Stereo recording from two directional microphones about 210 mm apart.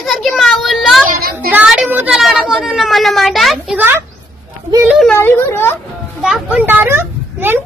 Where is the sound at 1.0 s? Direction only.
45° right (ahead or behind).